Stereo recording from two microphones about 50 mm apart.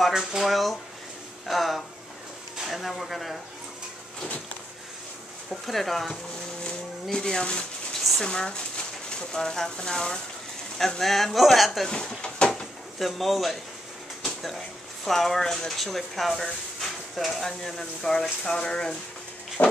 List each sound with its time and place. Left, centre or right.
0.1 s speech: centre
5.5 s speech: centre
6.6 s a sound: centre
8.0 s a sound: centre
8.3 s speech: centre
11.9 s speech: centre
13.0 s speech: centre
14.2 s a sound: centre
15.0 s speech: centre
19.6 s pig: left